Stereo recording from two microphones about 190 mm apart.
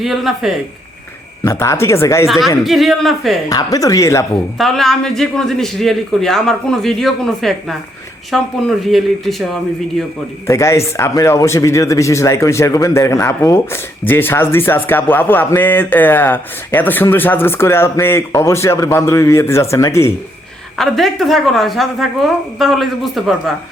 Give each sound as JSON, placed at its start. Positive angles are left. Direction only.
{"t": 0.0, "sound": "a man's voice", "side_deg": 0}
{"t": 1.5, "sound": "speech", "side_deg": 15}
{"t": 2.2, "sound": "a man's voice", "side_deg": 0}
{"t": 3.5, "sound": "speech", "side_deg": 20}
{"t": 4.5, "sound": "a man's voice", "side_deg": 0}
{"t": 10.4, "sound": "speech", "side_deg": 15}
{"t": 20.7, "sound": "a man's voice", "side_deg": 0}